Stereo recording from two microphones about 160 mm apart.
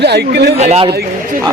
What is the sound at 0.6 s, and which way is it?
Speech, 40° right (ahead or behind).